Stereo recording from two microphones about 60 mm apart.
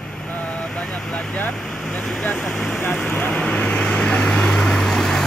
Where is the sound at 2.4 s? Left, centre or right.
Centre.